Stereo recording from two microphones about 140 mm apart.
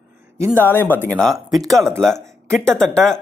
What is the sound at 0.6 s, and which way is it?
Speech, 15° left (ahead or behind).